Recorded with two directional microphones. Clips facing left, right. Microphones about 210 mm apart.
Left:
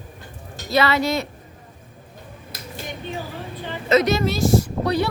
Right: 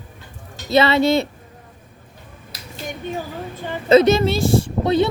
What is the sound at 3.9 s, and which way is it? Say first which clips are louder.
A woman's voice: right 5 dB; 30° right (ahead or behind).